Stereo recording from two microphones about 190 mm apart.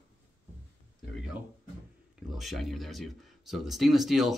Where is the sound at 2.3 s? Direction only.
Centre (ahead or behind).